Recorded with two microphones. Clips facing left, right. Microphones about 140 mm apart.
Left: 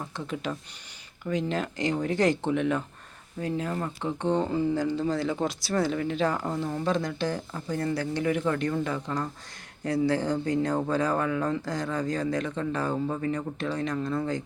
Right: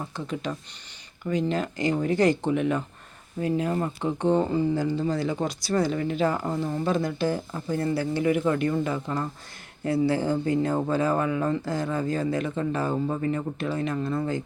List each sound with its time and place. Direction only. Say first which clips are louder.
0.0 s speech: right 2 dB; centre (ahead or behind)
3.4 s speech: right 4 dB; 15° right (ahead or behind)